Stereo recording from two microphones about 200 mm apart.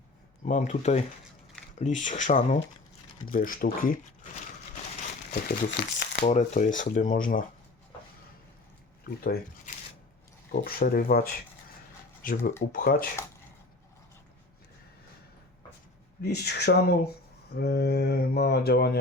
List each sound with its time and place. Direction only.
0.4 s speech: 40° left (ahead or behind)
5.3 s speech: 50° left (ahead or behind)
6.2 s speech: 35° left (ahead or behind)
9.0 s speech: 50° left (ahead or behind)
10.5 s speech: 50° left (ahead or behind)
16.2 s speech: 55° left (ahead or behind)